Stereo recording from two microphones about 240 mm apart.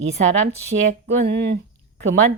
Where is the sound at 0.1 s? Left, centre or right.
Right.